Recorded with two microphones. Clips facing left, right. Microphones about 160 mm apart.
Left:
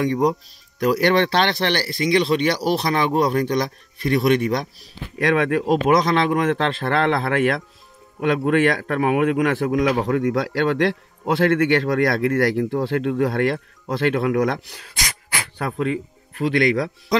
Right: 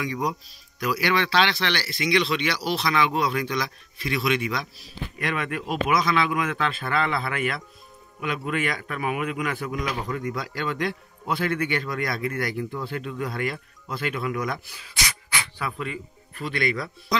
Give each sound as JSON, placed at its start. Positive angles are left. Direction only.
{"t": 0.0, "sound": "speech", "side_deg": 50}
{"t": 5.2, "sound": "speech", "side_deg": 70}
{"t": 5.9, "sound": "speech", "side_deg": 60}
{"t": 8.2, "sound": "speech", "side_deg": 65}
{"t": 11.9, "sound": "speech", "side_deg": 60}